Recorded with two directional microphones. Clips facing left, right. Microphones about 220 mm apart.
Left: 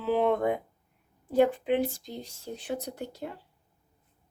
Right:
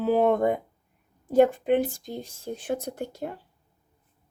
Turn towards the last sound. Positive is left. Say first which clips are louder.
# right 4 dB
turn(degrees=-50)  # may be behind; listen again after turning